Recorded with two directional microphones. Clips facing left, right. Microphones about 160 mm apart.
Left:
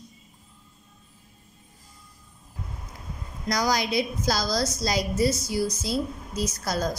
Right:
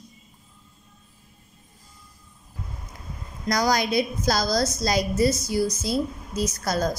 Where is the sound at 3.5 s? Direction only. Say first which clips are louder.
Right 3 dB; 50° right (ahead or behind).